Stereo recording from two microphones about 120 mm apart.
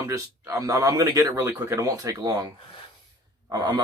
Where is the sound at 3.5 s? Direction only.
35° right (ahead or behind).